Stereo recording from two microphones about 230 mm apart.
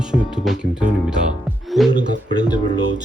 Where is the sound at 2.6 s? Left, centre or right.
Right.